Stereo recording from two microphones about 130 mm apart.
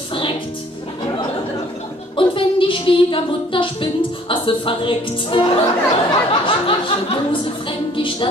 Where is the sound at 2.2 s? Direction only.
40° left (ahead or behind).